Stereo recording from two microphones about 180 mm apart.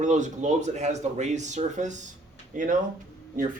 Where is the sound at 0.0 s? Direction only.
40° right (ahead or behind).